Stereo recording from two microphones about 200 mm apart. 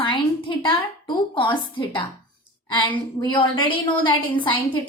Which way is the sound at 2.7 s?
25° left (ahead or behind).